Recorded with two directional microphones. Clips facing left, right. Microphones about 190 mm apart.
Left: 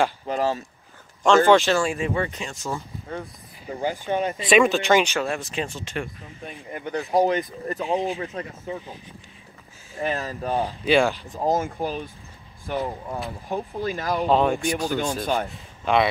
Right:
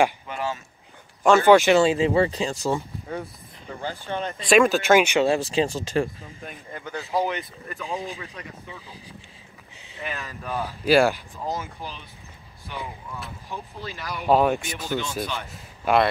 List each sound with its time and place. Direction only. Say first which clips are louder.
0.3 s speech: left 6 dB; 35° left (ahead or behind)
1.2 s speech: right 1 dB; 10° right (ahead or behind)
1.8 s speech: right 5 dB; 25° right (ahead or behind)
2.7 s speech: right 4 dB; centre (ahead or behind)
3.8 s speech: left 5 dB; 15° left (ahead or behind); by 5.2 s 10° right (ahead or behind)
5.2 s speech: right 6 dB; 30° right (ahead or behind)
6.7 s speech: left 4 dB; 30° left (ahead or behind)
10.0 s speech: left 7 dB; 35° left (ahead or behind)
10.8 s speech: right 2 dB; 5° right (ahead or behind)
11.3 s speech: left 8 dB; 50° left (ahead or behind)
14.2 s a man's voice: right 1 dB; 5° right (ahead or behind)